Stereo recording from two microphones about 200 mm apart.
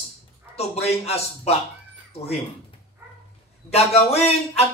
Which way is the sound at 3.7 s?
30° left (ahead or behind).